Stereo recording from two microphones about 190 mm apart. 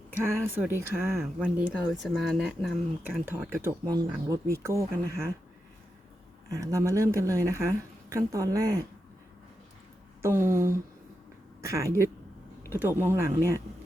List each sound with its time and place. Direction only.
0.2 s speech: 15° right (ahead or behind)
6.5 s speech: 15° right (ahead or behind)
10.2 s speech: 15° right (ahead or behind)